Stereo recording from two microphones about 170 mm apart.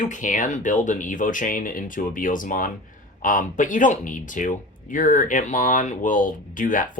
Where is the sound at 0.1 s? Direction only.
50° left (ahead or behind).